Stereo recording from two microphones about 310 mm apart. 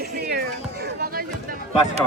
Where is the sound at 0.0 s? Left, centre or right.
Right.